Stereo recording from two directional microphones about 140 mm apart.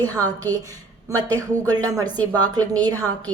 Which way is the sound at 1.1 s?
25° right (ahead or behind).